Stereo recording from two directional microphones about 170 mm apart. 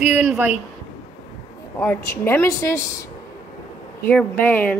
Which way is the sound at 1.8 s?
15° left (ahead or behind).